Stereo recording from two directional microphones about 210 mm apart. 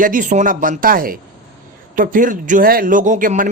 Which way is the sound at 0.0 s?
40° right (ahead or behind).